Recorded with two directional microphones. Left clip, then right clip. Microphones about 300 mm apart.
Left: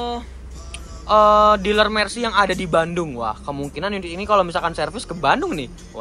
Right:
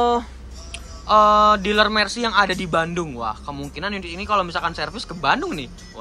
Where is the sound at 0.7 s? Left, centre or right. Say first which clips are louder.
Even; centre.